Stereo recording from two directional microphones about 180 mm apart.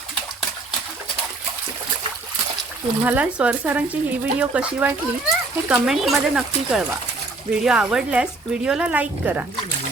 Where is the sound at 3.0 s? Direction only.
10° right (ahead or behind).